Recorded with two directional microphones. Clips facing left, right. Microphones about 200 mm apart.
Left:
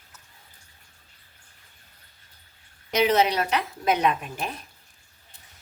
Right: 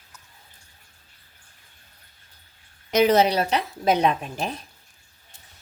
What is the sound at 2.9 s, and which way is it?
A woman's voice, 45° right (ahead or behind).